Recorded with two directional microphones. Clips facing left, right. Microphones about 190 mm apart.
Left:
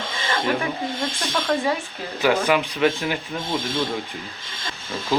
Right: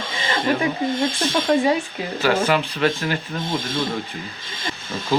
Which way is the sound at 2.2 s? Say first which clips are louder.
Even; 15° left (ahead or behind).